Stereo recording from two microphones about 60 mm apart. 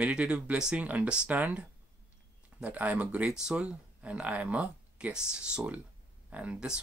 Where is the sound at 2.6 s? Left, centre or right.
Right.